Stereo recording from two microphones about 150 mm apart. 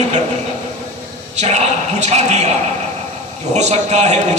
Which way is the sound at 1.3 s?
50° right (ahead or behind).